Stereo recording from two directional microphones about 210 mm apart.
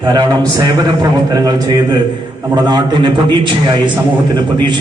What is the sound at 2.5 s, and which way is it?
Speech, 20° right (ahead or behind).